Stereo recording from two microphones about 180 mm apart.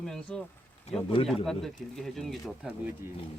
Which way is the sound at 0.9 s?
35° left (ahead or behind).